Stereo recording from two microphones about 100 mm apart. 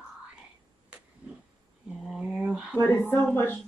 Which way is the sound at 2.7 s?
25° left (ahead or behind).